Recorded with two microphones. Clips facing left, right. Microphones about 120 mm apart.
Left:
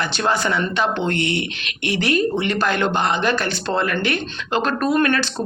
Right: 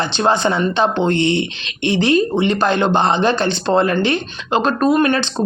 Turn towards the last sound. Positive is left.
turn(degrees=-20)  # may be behind; listen again after turning